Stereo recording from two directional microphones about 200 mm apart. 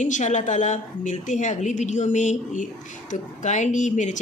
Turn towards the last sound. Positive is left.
turn(degrees=40)  # may be behind; listen again after turning